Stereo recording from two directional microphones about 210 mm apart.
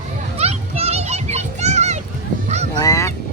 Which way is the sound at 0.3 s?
30° right (ahead or behind).